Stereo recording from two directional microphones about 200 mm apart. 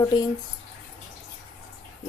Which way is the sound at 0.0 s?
20° left (ahead or behind).